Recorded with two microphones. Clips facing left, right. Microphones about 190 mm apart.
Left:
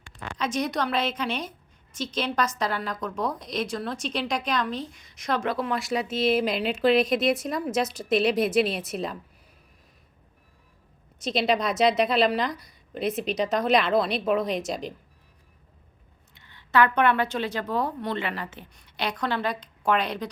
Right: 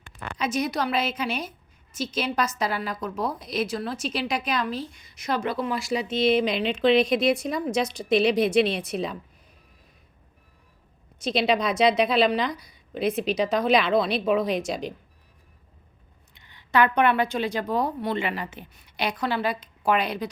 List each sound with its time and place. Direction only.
0.3 s a woman's voice: 10° right (ahead or behind)
11.2 s a woman's voice: centre (ahead or behind)
16.3 s a woman's voice: 15° right (ahead or behind)